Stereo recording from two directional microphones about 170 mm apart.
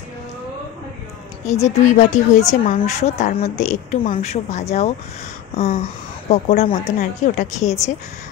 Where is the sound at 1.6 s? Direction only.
45° left (ahead or behind).